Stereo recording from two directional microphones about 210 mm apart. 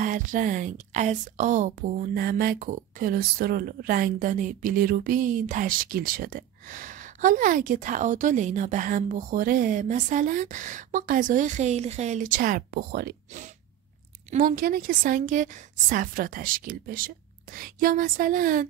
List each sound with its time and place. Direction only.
0.0 s speech: 40° right (ahead or behind)